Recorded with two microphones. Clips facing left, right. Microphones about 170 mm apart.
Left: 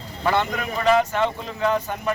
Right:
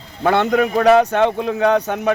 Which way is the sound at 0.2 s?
60° right (ahead or behind).